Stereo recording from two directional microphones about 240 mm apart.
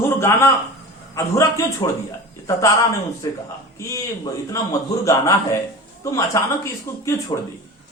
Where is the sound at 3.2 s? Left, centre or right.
Centre.